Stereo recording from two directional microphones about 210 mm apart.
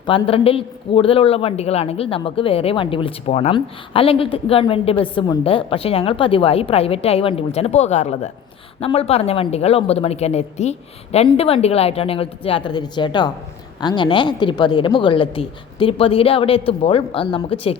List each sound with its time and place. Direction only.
0.0 s a man's voice: 25° left (ahead or behind)